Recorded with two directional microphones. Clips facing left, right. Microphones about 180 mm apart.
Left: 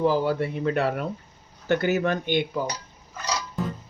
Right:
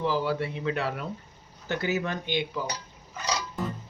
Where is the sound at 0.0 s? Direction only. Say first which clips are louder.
Left 5 dB; 45° left (ahead or behind).